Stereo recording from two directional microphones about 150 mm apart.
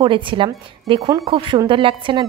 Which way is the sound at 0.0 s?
35° right (ahead or behind).